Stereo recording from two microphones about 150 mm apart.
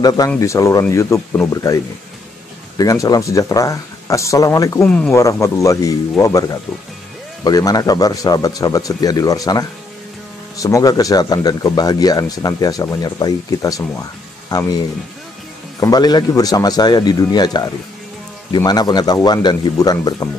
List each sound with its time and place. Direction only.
0.4 s speech: 20° left (ahead or behind)
2.8 s speech: 25° left (ahead or behind)
4.8 s speech: 5° left (ahead or behind)
5.1 s speech: 20° left (ahead or behind)
15.8 s speech: 25° left (ahead or behind)